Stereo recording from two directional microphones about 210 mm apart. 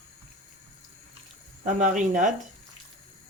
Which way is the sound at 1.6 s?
35° right (ahead or behind).